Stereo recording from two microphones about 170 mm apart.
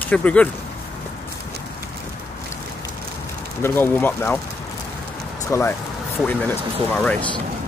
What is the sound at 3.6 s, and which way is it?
Speech, 10° left (ahead or behind).